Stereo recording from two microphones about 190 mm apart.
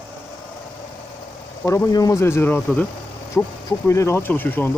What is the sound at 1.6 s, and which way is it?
Speech, 15° left (ahead or behind).